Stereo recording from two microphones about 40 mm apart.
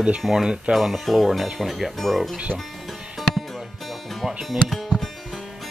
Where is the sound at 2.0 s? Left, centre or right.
Centre.